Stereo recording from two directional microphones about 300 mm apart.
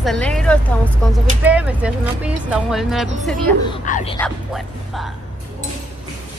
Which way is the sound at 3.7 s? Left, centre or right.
Left.